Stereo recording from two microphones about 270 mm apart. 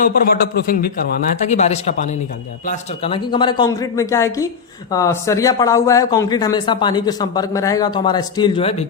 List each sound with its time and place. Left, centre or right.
0.0 s speech: left; by 8.7 s centre